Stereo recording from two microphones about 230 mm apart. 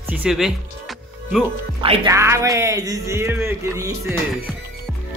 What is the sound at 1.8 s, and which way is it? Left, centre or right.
Speech, right.